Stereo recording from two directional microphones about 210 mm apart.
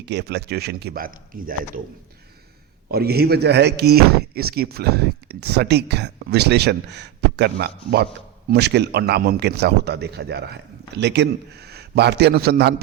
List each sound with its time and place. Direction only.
0.0 s speech: 55° right (ahead or behind)
2.9 s speech: 50° right (ahead or behind)